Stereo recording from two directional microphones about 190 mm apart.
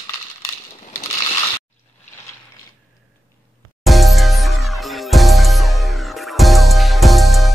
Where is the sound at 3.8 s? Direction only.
Centre (ahead or behind).